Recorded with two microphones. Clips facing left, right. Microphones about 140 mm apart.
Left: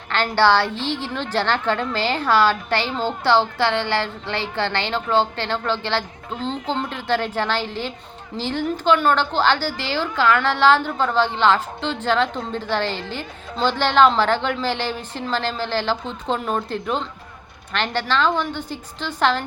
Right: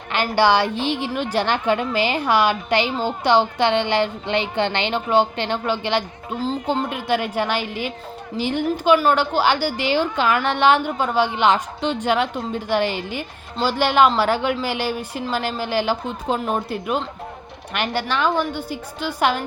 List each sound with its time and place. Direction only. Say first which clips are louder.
0.1 s a woman's voice: even; 15° right (ahead or behind)
6.4 s a woman's voice: right 3 dB; 5° right (ahead or behind)